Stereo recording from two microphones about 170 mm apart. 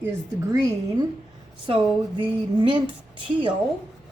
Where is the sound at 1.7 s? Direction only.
30° right (ahead or behind).